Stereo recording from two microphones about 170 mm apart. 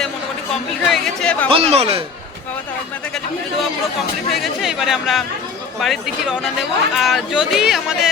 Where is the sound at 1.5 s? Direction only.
35° right (ahead or behind).